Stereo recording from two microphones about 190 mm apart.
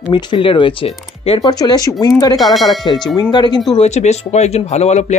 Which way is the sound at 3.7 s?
35° left (ahead or behind).